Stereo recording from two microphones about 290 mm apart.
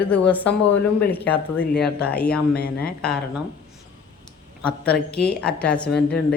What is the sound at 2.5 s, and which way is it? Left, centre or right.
Speech, left.